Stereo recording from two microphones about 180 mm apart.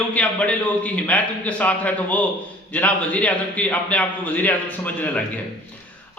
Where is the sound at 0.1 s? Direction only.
5° left (ahead or behind).